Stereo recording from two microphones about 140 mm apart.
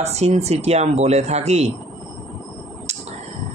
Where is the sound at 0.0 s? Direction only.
50° right (ahead or behind).